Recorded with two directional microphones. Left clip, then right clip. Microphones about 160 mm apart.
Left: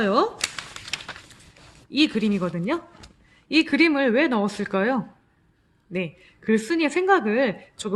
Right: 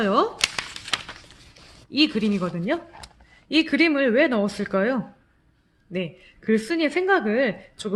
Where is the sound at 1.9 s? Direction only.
15° left (ahead or behind).